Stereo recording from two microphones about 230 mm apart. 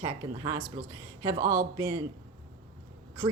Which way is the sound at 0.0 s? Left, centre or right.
Centre.